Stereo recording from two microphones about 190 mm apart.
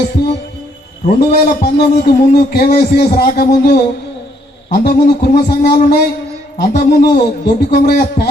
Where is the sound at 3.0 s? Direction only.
55° left (ahead or behind).